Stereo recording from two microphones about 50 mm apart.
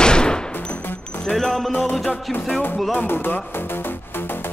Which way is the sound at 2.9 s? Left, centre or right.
Left.